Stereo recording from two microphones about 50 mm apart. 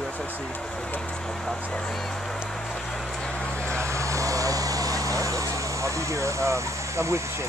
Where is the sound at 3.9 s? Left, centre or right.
Right.